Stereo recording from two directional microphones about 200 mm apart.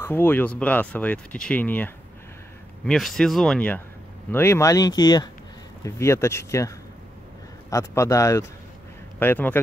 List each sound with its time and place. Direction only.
0.0 s speech: 10° left (ahead or behind)
7.7 s speech: 15° left (ahead or behind)